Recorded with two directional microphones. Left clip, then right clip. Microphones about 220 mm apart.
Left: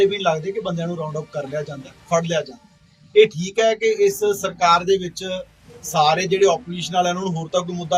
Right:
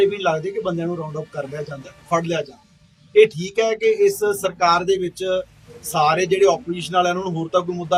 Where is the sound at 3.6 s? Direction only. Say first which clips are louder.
Even; 5° left (ahead or behind).